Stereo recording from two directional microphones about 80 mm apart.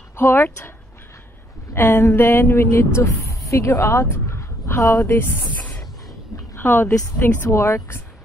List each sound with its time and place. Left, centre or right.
0.1 s a woman's voice: left
7.4 s speech: left